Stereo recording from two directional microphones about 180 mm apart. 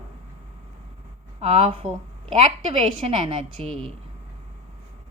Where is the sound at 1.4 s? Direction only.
35° right (ahead or behind).